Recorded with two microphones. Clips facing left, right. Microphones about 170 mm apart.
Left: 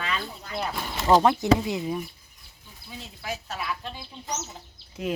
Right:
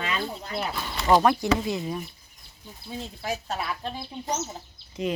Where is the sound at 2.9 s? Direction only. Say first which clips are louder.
Right 4 dB; 35° right (ahead or behind).